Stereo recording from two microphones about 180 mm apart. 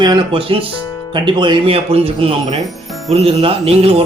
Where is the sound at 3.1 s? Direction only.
35° right (ahead or behind).